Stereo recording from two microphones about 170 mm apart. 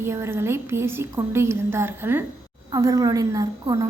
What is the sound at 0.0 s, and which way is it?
A woman's voice, 15° right (ahead or behind).